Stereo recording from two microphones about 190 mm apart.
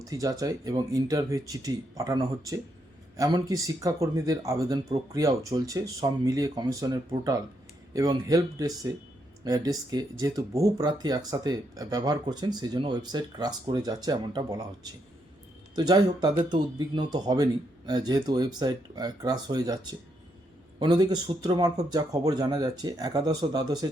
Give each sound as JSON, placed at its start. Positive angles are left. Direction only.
{"t": 0.0, "sound": "speech", "side_deg": -20}
{"t": 15.7, "sound": "speech", "side_deg": -20}